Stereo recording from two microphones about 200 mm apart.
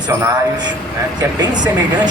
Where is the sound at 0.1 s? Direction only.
15° right (ahead or behind).